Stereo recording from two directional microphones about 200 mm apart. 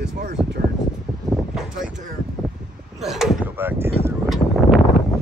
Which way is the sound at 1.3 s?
Centre (ahead or behind).